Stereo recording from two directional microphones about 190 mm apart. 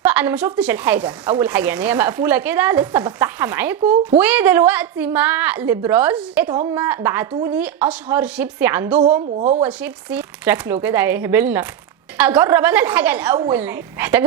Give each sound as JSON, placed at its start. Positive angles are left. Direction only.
{"t": 0.0, "sound": "speech", "side_deg": -10}
{"t": 9.4, "sound": "speech", "side_deg": -35}
{"t": 9.6, "sound": "speech", "side_deg": -10}